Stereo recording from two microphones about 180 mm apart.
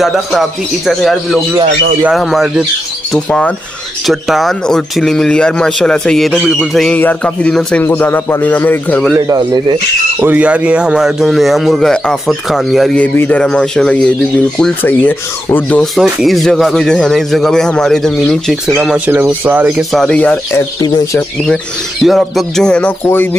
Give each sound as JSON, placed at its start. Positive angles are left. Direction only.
{"t": 0.0, "sound": "speech", "side_deg": 0}
{"t": 9.1, "sound": "speech", "side_deg": -20}
{"t": 10.2, "sound": "speech", "side_deg": -10}
{"t": 20.8, "sound": "speech", "side_deg": 20}
{"t": 22.0, "sound": "speech", "side_deg": 0}